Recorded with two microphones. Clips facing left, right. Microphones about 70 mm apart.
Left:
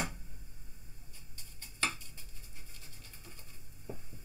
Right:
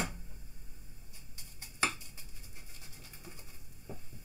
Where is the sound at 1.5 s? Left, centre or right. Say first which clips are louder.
Right 2 dB; centre.